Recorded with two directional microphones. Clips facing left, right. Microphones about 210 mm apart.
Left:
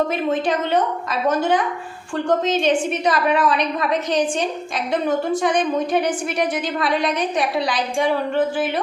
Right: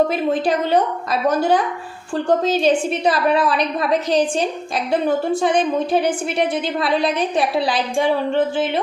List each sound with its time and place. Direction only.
0.1 s a woman's voice: 35° right (ahead or behind)